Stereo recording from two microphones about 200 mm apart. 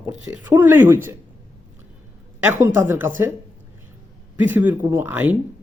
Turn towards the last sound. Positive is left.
turn(degrees=-10)  # may be behind; listen again after turning